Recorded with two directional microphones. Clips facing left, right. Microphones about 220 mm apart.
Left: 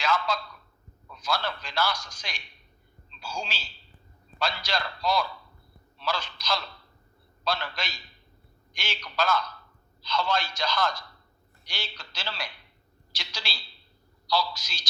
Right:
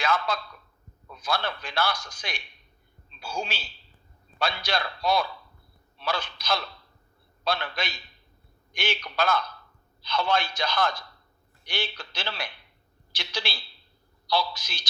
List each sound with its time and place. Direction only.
0.0 s a man's voice: 55° right (ahead or behind)